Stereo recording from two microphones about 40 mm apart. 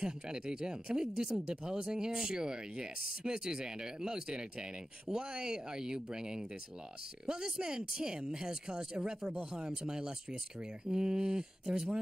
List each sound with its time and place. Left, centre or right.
0.0 s speech: centre